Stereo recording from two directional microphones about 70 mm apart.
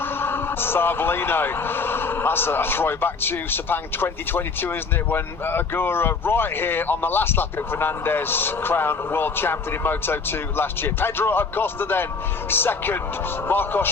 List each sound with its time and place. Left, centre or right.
0.0 s speech: left